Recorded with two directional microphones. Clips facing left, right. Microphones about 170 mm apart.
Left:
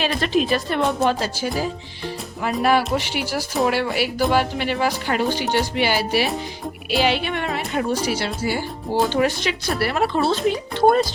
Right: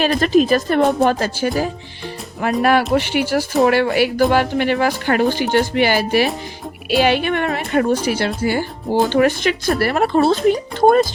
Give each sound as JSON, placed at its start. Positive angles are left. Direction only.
{"t": 0.0, "sound": "speech", "side_deg": -45}